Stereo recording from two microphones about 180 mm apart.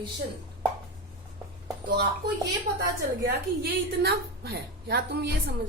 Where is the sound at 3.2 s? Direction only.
60° right (ahead or behind).